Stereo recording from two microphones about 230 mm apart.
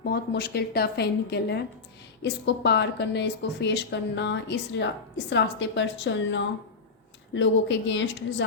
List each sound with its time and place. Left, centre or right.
0.0 s a woman's voice: left